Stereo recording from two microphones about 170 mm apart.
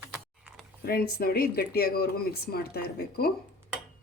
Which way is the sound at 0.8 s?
65° left (ahead or behind).